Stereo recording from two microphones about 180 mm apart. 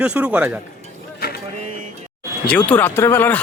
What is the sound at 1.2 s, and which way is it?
Vehicle, 60° left (ahead or behind).